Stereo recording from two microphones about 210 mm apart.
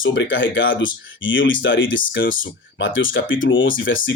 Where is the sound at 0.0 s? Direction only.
65° left (ahead or behind).